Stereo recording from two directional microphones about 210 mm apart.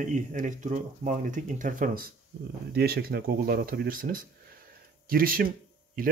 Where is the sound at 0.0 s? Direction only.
40° right (ahead or behind).